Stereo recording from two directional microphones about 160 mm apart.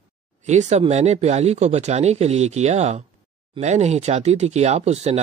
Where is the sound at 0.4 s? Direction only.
45° right (ahead or behind).